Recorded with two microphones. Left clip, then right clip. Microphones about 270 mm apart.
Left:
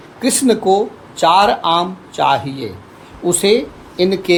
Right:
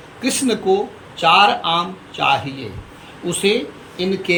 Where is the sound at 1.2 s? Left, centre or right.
Centre.